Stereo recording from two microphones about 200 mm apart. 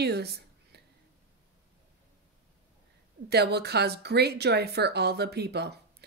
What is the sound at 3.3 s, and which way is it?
A woman's voice, 55° right (ahead or behind).